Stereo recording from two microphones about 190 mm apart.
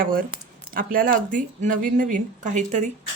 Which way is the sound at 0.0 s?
50° right (ahead or behind).